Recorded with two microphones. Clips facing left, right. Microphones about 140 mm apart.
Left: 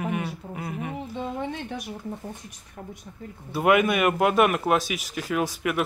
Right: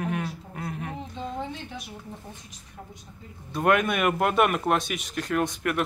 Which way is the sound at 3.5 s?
5° left (ahead or behind).